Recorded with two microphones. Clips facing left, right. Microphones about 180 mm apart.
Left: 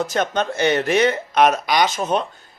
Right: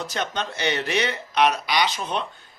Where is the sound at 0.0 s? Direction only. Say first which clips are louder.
Left 7 dB; 50° left (ahead or behind).